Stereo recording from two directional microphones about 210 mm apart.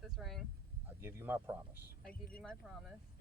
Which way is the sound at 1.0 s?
10° right (ahead or behind).